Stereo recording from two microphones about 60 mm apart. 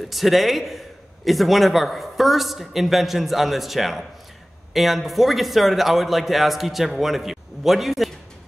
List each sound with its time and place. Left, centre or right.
0.1 s a man's voice: centre